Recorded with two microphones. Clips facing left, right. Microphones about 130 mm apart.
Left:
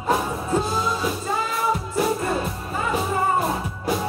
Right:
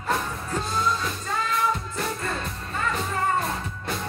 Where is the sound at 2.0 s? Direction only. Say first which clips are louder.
Left 10 dB; 20° left (ahead or behind).